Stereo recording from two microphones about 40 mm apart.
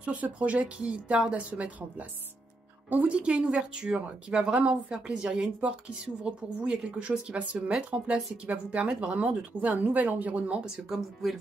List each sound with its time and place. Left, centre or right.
0.0 s speech: right
3.1 s speech: right
10.8 s speech: centre